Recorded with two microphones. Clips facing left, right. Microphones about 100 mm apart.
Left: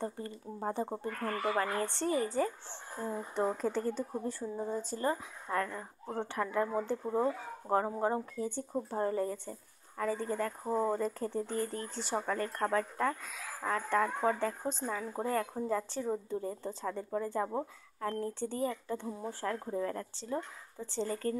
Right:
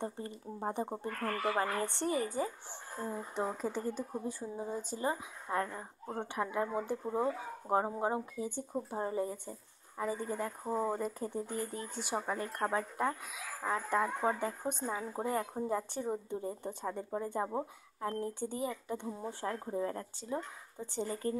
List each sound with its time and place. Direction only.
0.0 s a woman's voice: 20° right (ahead or behind)
8.5 s speech: 5° right (ahead or behind)
9.0 s speech: 15° right (ahead or behind)
10.6 s speech: centre (ahead or behind)
10.9 s a woman's voice: 10° right (ahead or behind); by 17.5 s 25° right (ahead or behind)
18.0 s a woman's voice: 15° right (ahead or behind)